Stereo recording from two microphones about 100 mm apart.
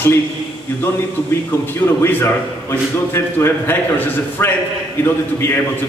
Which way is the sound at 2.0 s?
25° left (ahead or behind).